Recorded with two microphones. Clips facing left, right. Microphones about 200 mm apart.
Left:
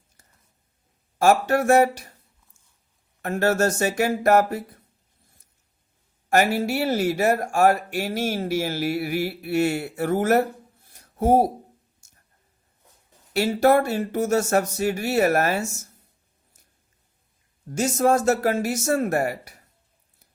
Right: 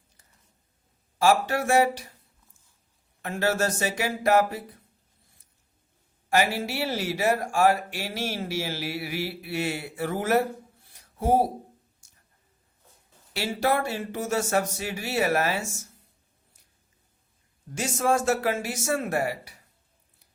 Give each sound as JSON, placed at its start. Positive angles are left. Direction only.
{"t": 1.2, "sound": "speech", "side_deg": 45}
{"t": 3.2, "sound": "speech", "side_deg": 50}
{"t": 6.3, "sound": "speech", "side_deg": 45}
{"t": 10.9, "sound": "a sound", "side_deg": 45}
{"t": 13.3, "sound": "speech", "side_deg": 45}
{"t": 17.7, "sound": "speech", "side_deg": 40}